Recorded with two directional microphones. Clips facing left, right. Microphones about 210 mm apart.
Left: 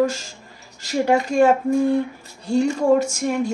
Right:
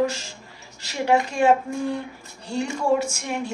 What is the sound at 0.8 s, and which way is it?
Speech, 45° left (ahead or behind).